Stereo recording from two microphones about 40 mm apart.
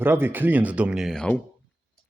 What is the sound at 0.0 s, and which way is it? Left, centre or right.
Speech, right.